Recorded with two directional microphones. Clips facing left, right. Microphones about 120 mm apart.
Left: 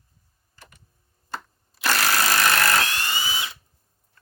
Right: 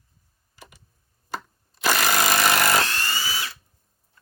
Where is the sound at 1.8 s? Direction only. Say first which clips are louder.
Right 1 dB; 15° right (ahead or behind).